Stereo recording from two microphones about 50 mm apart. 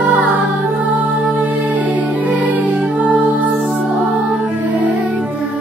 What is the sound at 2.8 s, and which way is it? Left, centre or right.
Music, centre.